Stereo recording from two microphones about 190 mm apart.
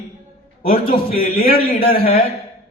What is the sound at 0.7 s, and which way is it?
Speech, 50° left (ahead or behind).